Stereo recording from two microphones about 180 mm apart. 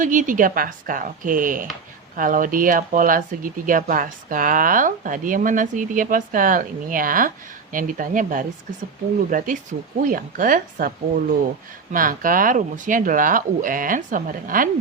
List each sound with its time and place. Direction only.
0.0 s speech: 45° right (ahead or behind)